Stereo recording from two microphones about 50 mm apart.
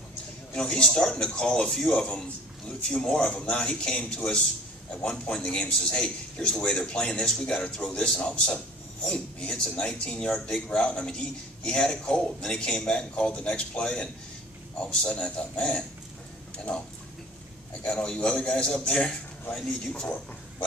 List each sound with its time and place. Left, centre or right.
0.6 s a man's voice: centre
17.9 s a man's voice: centre